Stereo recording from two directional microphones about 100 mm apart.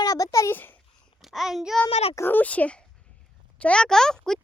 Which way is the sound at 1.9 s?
90° left.